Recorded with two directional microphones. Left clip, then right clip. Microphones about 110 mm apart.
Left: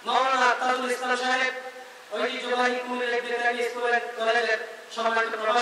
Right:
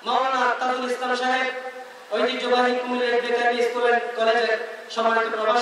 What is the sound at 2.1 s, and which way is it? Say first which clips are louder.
A man's voice: right 5 dB; 15° right (ahead or behind).